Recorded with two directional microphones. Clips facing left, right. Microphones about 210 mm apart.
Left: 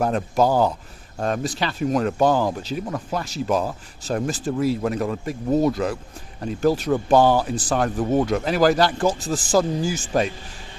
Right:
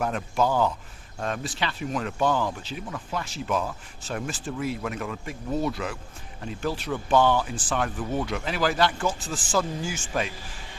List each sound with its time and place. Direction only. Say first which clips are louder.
0.0 s speech: left 5 dB; 35° left (ahead or behind)